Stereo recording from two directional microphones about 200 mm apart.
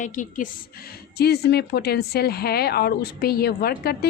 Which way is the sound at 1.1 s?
55° left (ahead or behind).